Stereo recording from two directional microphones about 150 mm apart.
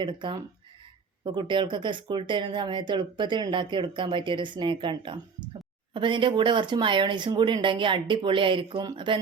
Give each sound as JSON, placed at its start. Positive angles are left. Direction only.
{"t": 0.0, "sound": "speech", "side_deg": -30}